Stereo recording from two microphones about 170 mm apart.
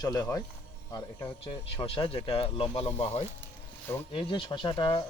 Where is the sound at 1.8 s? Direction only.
30° left (ahead or behind).